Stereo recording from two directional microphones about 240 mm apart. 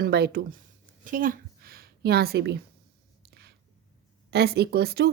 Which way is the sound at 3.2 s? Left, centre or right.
Right.